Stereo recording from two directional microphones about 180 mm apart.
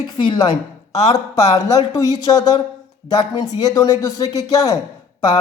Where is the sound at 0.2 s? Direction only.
25° left (ahead or behind).